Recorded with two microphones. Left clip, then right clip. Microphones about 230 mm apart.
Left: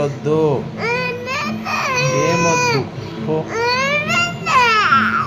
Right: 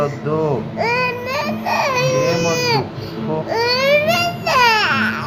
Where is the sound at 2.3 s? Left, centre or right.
Centre.